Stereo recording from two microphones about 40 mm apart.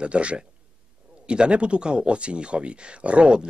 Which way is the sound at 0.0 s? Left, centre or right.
Right.